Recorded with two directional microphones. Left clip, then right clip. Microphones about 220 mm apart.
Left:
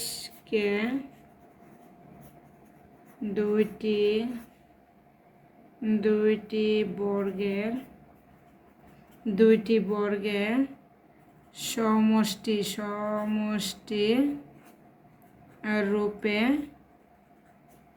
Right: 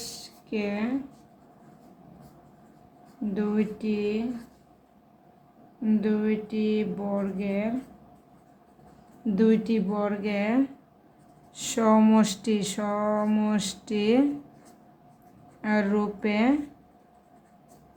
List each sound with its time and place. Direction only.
0.5 s speech: 15° right (ahead or behind)
3.3 s speech: 15° right (ahead or behind)
5.8 s speech: 15° right (ahead or behind)
9.3 s speech: 15° right (ahead or behind)
11.7 s speech: 20° right (ahead or behind)
15.6 s speech: 20° right (ahead or behind)